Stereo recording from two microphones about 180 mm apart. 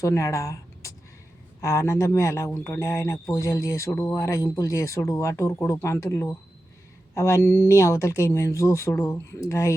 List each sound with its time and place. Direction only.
0.0 s speech: 15° left (ahead or behind)